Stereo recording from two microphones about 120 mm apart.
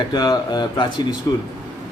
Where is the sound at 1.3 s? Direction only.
20° left (ahead or behind).